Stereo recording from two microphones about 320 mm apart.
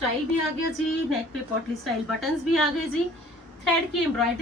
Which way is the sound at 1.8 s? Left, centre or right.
Centre.